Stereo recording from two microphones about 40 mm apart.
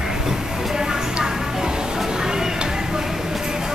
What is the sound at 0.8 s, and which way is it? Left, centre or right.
Music, centre.